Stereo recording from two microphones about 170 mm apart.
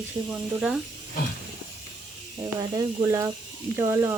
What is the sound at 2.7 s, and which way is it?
Speech, 20° right (ahead or behind).